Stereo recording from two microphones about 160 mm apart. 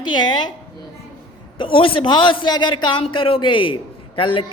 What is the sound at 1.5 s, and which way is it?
A man's voice, 35° left (ahead or behind).